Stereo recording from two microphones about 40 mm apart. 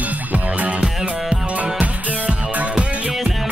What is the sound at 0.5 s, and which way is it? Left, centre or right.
Music, right.